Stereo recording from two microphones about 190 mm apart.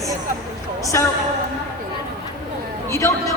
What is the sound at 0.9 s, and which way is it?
Speech, 15° left (ahead or behind).